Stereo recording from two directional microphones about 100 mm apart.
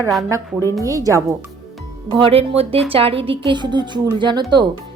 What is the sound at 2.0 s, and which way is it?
Speech, 55° right (ahead or behind).